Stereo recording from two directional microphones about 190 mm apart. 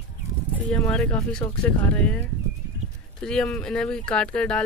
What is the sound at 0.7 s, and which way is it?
Speech, 5° left (ahead or behind).